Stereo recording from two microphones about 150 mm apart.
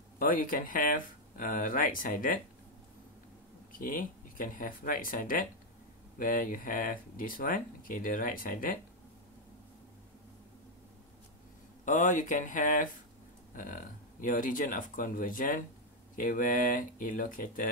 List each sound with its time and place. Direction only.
0.2 s speech: 70° left (ahead or behind)
3.7 s speech: 65° left (ahead or behind)
11.8 s speech: 60° left (ahead or behind)